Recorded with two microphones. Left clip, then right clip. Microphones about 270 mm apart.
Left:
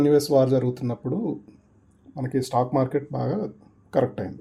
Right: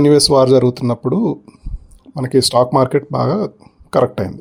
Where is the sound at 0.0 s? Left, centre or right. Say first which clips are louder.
Right 8 dB; right.